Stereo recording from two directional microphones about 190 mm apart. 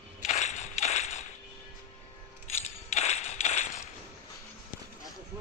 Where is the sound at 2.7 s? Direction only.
35° left (ahead or behind).